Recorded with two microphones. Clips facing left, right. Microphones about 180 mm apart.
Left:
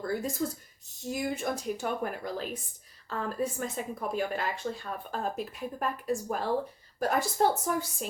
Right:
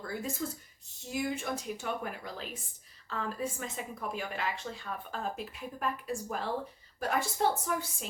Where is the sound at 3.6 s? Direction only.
40° left (ahead or behind).